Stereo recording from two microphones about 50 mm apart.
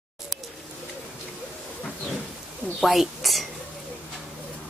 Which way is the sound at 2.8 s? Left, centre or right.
Centre.